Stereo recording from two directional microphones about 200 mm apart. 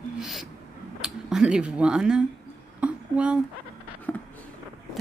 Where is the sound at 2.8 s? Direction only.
5° right (ahead or behind).